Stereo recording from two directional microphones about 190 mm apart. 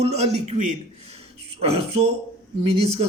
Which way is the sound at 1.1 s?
30° right (ahead or behind).